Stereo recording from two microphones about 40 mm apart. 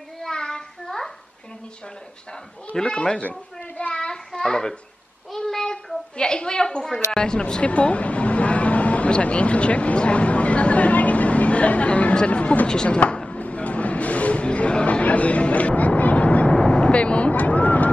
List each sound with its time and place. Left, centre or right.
0.2 s child singing: centre
0.8 s a sound: centre
2.7 s a woman's voice: centre
3.2 s a sound: left
3.9 s child singing: centre
5.5 s a sound: centre
6.1 s a woman's voice: left
7.6 s a woman's voice: left
13.3 s vehicle: left
16.5 s vehicle: left